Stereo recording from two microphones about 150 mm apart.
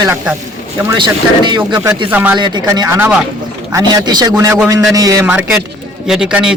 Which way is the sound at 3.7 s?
25° right (ahead or behind).